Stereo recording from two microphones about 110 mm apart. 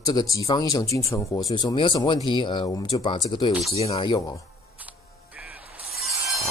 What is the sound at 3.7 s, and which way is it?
Speech, 65° left (ahead or behind).